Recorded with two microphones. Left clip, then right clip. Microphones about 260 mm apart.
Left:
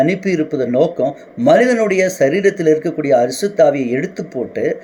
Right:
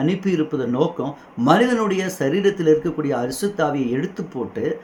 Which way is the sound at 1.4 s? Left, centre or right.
Right.